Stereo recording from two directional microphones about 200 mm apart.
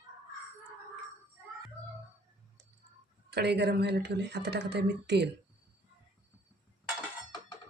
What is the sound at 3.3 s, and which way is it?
Speech, 55° right (ahead or behind).